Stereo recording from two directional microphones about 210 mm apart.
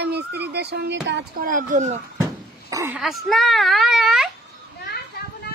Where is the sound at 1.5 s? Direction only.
40° right (ahead or behind).